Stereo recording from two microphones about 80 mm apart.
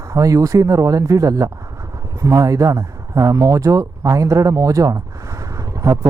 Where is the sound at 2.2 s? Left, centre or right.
Right.